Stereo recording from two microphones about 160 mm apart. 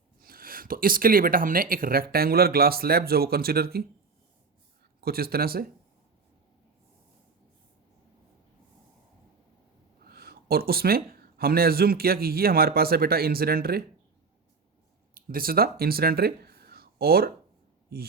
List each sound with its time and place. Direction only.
0.2 s speech: 65° right (ahead or behind)
4.9 s speech: 70° right (ahead or behind)
10.0 s speech: 75° right (ahead or behind)
15.1 s speech: 65° right (ahead or behind)